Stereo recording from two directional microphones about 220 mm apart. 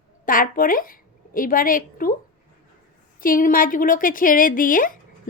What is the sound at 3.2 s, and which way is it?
A woman's voice, 40° left (ahead or behind).